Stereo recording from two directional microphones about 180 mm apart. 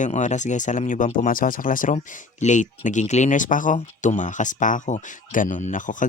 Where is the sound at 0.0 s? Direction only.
40° left (ahead or behind).